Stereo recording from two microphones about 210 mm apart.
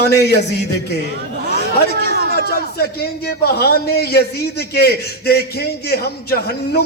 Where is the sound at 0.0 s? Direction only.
50° left (ahead or behind).